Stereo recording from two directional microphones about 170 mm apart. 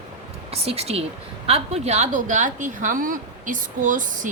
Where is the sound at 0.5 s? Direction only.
35° right (ahead or behind).